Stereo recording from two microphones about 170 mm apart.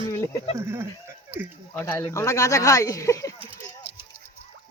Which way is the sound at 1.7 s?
15° left (ahead or behind).